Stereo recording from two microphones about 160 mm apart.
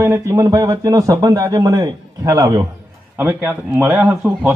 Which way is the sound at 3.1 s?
10° right (ahead or behind).